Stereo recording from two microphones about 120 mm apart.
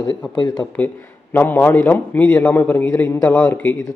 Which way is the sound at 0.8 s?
10° left (ahead or behind).